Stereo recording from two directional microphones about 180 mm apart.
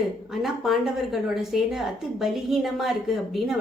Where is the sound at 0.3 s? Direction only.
Centre (ahead or behind).